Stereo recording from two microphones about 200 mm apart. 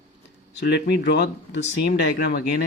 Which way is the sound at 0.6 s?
60° left (ahead or behind).